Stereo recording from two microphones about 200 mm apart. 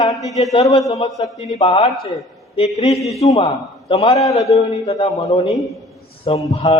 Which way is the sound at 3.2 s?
30° left (ahead or behind).